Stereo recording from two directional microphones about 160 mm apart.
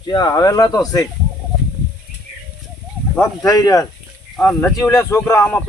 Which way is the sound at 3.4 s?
25° left (ahead or behind).